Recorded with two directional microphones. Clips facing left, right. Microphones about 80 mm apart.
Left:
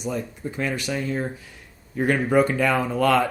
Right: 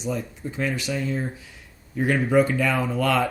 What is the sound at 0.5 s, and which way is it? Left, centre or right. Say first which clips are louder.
Speech: even; left.